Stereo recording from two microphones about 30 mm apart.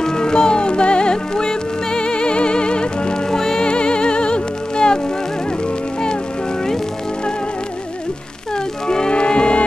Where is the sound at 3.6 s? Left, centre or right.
Left.